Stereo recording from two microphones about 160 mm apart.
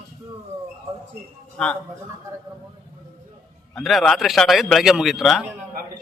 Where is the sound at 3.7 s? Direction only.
Centre (ahead or behind).